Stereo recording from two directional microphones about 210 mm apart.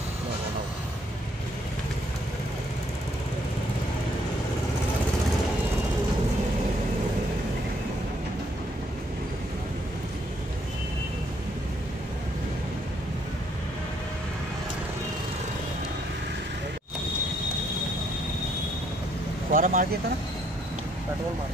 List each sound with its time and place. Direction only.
19.5 s speech: 40° right (ahead or behind)